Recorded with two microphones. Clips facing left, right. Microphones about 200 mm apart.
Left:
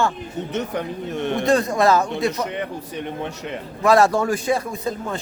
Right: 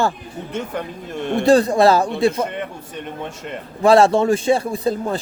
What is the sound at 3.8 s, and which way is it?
Speech, 25° right (ahead or behind).